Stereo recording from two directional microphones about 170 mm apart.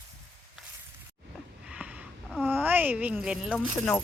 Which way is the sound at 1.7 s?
10° right (ahead or behind).